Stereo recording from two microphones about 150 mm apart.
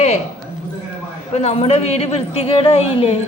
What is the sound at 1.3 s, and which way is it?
A woman's voice, 45° left (ahead or behind).